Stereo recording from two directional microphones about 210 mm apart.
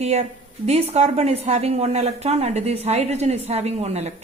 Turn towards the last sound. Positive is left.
turn(degrees=-30)  # may be behind; listen again after turning